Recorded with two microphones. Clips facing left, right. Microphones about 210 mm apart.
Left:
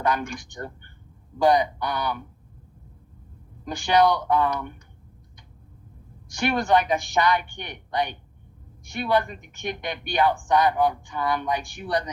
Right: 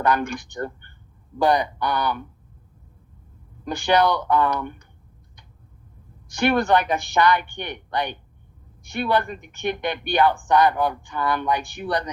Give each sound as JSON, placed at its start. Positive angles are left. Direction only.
{"t": 0.0, "sound": "speech", "side_deg": -60}
{"t": 3.7, "sound": "speech", "side_deg": -60}
{"t": 6.2, "sound": "speech", "side_deg": -60}